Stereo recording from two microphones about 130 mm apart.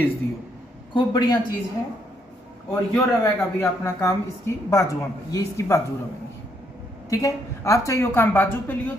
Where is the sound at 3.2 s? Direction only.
20° left (ahead or behind).